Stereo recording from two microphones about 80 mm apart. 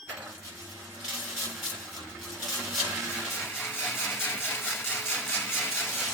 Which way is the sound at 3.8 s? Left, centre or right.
Centre.